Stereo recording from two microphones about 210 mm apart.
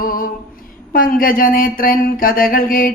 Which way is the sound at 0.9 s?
40° left (ahead or behind).